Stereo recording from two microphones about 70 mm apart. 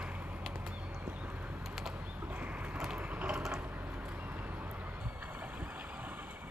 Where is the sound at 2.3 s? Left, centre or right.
Centre.